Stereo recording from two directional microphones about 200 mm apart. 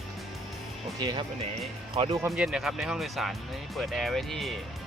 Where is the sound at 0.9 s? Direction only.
20° right (ahead or behind).